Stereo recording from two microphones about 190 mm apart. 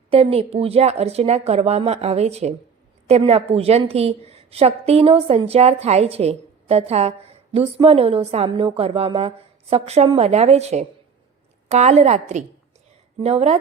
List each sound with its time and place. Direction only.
0.1 s a woman's voice: 30° right (ahead or behind)